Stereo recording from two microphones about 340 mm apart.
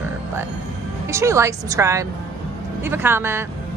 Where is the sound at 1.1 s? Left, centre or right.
Centre.